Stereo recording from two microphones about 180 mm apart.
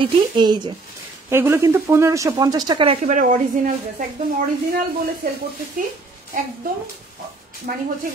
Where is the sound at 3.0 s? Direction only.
45° right (ahead or behind).